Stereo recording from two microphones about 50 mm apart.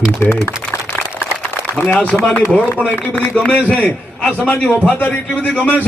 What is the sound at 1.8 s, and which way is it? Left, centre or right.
A man's voice, left.